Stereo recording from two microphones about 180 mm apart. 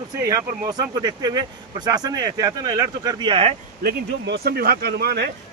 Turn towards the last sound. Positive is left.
turn(degrees=-65)  # may be behind; listen again after turning